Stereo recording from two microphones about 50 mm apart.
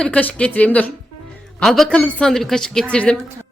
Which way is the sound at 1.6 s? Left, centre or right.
Centre.